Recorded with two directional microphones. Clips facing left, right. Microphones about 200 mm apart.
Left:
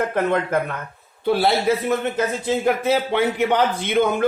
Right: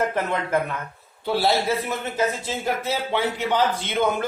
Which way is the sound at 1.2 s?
55° left (ahead or behind).